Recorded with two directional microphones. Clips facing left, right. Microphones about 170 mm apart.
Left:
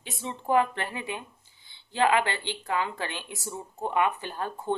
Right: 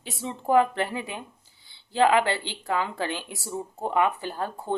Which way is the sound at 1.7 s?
40° right (ahead or behind).